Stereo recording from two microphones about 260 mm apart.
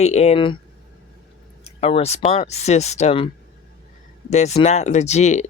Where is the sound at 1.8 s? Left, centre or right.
Left.